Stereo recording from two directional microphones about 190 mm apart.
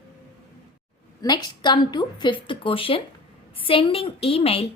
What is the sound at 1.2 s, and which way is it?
A woman's voice, 20° left (ahead or behind).